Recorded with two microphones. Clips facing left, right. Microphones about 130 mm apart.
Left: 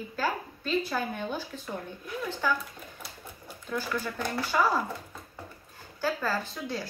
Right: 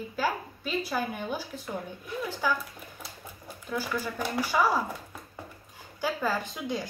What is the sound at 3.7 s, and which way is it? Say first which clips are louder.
Speech: even; 10° right (ahead or behind).